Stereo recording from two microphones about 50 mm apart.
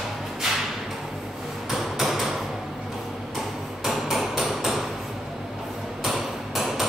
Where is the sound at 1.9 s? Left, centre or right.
Centre.